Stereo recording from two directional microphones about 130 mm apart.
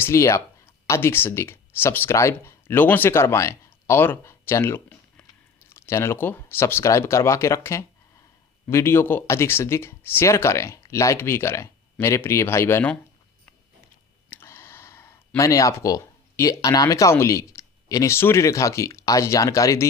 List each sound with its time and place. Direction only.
0.0 s speech: 20° left (ahead or behind)
14.3 s speech: 15° left (ahead or behind)